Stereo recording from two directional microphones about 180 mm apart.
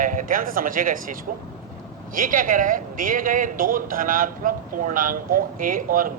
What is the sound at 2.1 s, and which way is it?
Speech, 50° right (ahead or behind).